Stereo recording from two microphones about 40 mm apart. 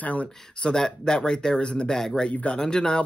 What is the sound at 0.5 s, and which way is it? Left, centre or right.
Speech, centre.